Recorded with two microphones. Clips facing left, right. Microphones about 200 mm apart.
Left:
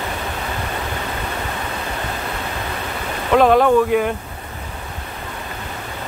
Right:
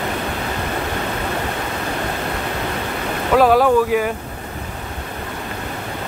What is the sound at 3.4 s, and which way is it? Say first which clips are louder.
Speech: left 1 dB; 5° right (ahead or behind).